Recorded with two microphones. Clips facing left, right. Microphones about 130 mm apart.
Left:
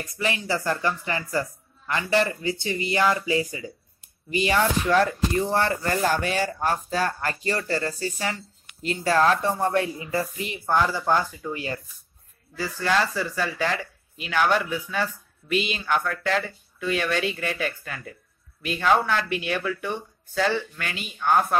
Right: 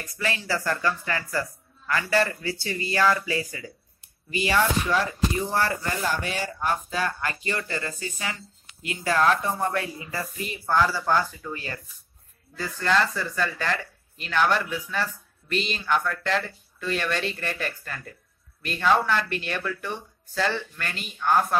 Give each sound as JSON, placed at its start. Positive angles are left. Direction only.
{"t": 0.2, "sound": "speech", "side_deg": 20}
{"t": 6.0, "sound": "speech", "side_deg": 45}
{"t": 10.7, "sound": "speech", "side_deg": 15}